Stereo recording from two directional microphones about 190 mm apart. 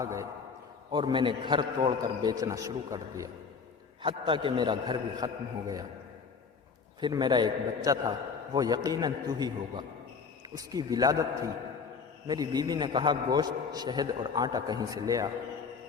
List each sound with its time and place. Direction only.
0.0 s a man's voice: 15° right (ahead or behind)
7.0 s a man's voice: 20° right (ahead or behind)